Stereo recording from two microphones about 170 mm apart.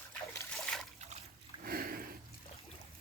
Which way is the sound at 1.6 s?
60° right (ahead or behind).